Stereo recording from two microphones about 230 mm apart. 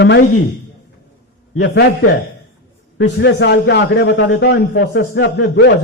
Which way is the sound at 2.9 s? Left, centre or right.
Left.